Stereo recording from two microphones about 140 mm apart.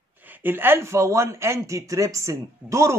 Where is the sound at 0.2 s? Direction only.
15° right (ahead or behind).